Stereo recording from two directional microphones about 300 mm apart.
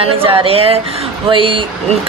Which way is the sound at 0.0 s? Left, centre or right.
Centre.